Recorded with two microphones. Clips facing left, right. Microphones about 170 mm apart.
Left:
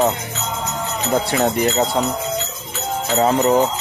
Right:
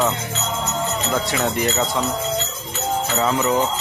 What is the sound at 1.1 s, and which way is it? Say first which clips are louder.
Speech: left 6 dB; 35° left (ahead or behind).